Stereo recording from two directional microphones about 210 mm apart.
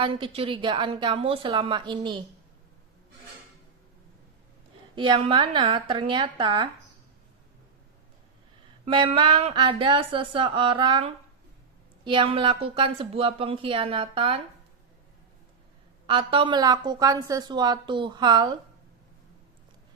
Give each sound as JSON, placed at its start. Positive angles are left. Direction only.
{"t": 0.0, "sound": "a woman's voice", "side_deg": -25}
{"t": 4.9, "sound": "a woman's voice", "side_deg": -25}
{"t": 8.8, "sound": "a woman's voice", "side_deg": -25}
{"t": 16.0, "sound": "a woman's voice", "side_deg": -25}